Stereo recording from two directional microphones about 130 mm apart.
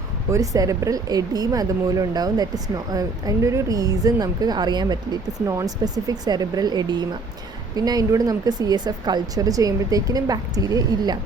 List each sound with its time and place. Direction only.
0.3 s speech: 25° right (ahead or behind)